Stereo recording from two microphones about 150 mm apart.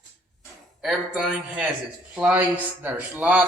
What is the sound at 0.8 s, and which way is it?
Speech, 5° right (ahead or behind).